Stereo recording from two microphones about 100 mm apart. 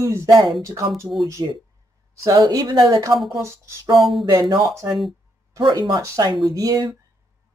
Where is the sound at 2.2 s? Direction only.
40° right (ahead or behind).